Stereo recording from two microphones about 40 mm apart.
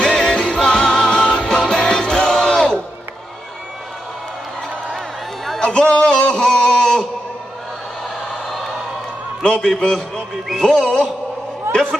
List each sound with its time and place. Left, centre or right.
0.0 s music: centre
5.6 s a sound: left
9.4 s a man's voice: left
10.5 s music: centre
10.8 s a man's voice: centre